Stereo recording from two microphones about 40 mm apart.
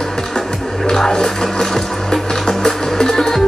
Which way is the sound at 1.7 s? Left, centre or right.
Centre.